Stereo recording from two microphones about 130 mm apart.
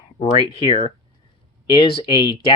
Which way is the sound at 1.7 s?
45° left (ahead or behind).